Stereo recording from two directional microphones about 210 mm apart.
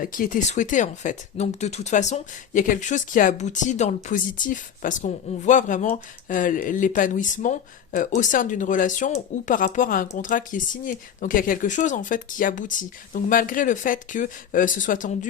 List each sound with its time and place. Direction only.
0.0 s speech: 40° left (ahead or behind)